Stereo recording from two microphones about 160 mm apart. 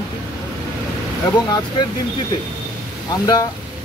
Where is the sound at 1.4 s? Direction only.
25° left (ahead or behind).